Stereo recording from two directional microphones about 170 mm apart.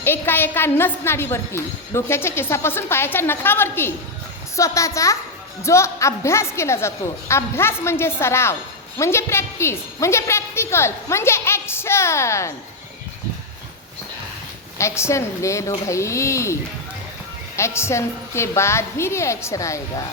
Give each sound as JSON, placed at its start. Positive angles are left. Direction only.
{"t": 0.0, "sound": "a woman's voice", "side_deg": 10}
{"t": 14.8, "sound": "a woman's voice", "side_deg": 15}
{"t": 17.6, "sound": "a woman's voice", "side_deg": 15}